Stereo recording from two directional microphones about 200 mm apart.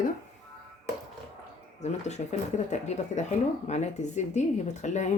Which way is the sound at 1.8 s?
35° left (ahead or behind).